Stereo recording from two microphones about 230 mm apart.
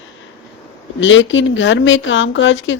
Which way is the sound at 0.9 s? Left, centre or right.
Left.